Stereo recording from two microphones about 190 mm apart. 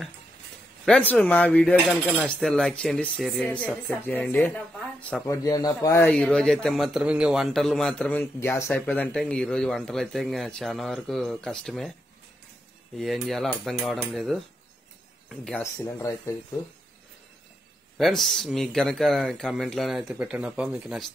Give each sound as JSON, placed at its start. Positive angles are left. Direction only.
{"t": 0.8, "sound": "cutlery", "side_deg": 5}
{"t": 12.9, "sound": "cutlery", "side_deg": 0}
{"t": 15.2, "sound": "speech", "side_deg": 5}
{"t": 15.6, "sound": "speech", "side_deg": 15}
{"t": 17.9, "sound": "cutlery", "side_deg": 0}